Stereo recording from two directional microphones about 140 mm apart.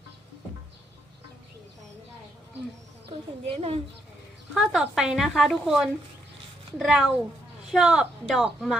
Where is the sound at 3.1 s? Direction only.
45° right (ahead or behind).